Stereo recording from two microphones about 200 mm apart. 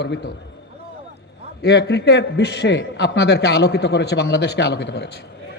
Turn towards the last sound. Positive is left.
turn(degrees=60)  # may be behind; listen again after turning